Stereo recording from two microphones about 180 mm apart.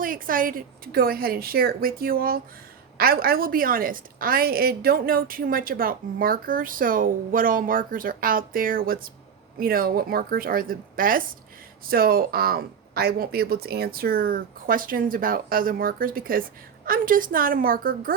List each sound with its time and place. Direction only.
0.0 s a woman's voice: 50° right (ahead or behind)